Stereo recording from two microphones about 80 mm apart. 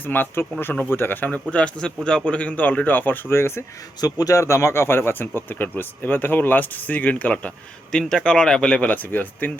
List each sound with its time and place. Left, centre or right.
0.0 s speech: left
4.0 s speech: left